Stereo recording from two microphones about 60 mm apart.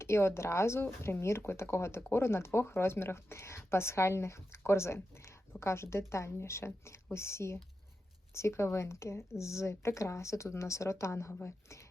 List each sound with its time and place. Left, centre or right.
0.0 s speech: left